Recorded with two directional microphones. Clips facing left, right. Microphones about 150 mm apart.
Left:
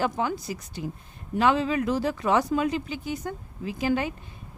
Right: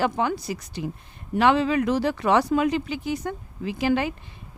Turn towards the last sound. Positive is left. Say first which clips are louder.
# right 3 dB
turn(degrees=-85)